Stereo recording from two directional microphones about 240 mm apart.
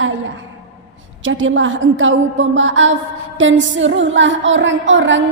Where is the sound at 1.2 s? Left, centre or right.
Right.